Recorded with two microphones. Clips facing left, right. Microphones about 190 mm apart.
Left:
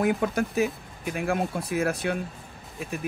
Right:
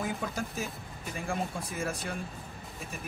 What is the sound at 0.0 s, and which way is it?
Speech, 70° left (ahead or behind).